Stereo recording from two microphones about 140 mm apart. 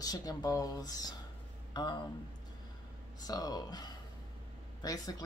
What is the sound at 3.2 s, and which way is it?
Speech, 25° left (ahead or behind).